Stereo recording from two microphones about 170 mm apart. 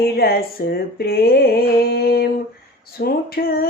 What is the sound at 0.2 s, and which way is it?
Speech, 65° left (ahead or behind).